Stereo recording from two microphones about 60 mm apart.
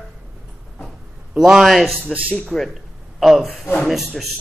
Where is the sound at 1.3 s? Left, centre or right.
Centre.